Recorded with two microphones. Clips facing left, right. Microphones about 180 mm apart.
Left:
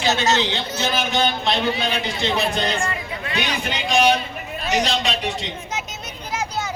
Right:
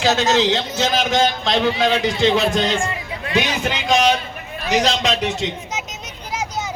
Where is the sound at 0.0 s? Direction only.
90° right.